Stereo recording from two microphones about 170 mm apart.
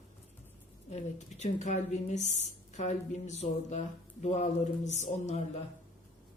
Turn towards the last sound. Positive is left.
turn(degrees=40)  # may be behind; listen again after turning